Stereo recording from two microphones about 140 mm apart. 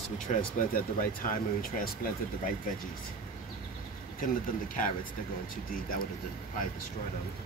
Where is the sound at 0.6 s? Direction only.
80° left.